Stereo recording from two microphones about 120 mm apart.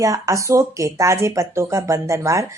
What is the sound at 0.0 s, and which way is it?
A woman's voice, 30° right (ahead or behind).